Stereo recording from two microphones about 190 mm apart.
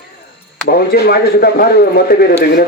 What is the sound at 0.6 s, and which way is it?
Speech, 55° left (ahead or behind).